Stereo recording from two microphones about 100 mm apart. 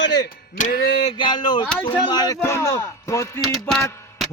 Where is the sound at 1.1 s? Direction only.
50° left (ahead or behind).